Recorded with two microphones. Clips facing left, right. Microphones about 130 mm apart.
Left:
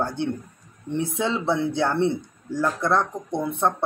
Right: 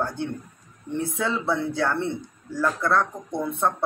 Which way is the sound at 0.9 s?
20° left (ahead or behind).